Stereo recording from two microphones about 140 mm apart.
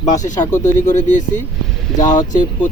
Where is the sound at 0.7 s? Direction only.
60° left (ahead or behind).